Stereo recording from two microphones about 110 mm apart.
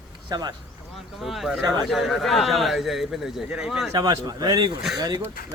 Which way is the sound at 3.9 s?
35° right (ahead or behind).